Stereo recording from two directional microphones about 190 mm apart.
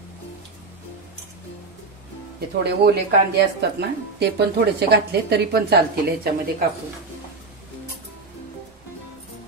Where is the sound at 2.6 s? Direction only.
55° right (ahead or behind).